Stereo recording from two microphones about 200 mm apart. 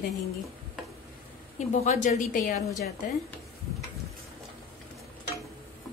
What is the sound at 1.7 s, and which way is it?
Speech, 35° left (ahead or behind).